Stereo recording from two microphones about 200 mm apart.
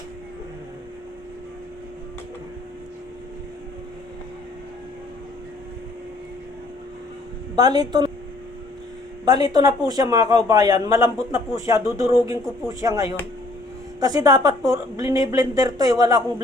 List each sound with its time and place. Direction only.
7.5 s a woman's voice: 20° right (ahead or behind)
9.2 s a man's voice: 20° right (ahead or behind)